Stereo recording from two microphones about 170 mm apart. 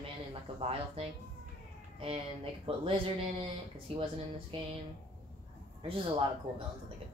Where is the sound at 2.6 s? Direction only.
30° right (ahead or behind).